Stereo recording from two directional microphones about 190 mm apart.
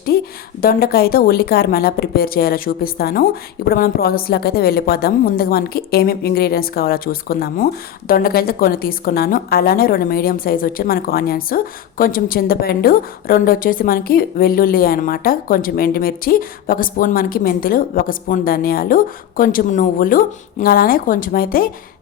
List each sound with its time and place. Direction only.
0.1 s a woman's voice: 55° left (ahead or behind)